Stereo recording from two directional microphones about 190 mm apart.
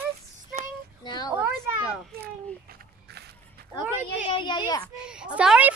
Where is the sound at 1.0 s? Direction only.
20° left (ahead or behind).